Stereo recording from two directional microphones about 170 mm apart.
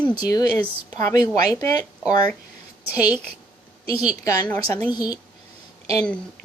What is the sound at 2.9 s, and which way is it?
Speech, 10° right (ahead or behind).